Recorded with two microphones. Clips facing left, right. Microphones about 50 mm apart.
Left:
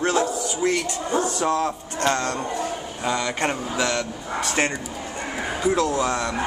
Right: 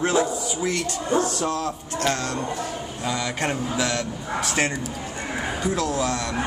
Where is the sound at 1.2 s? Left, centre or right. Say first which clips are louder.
Left 4 dB; left.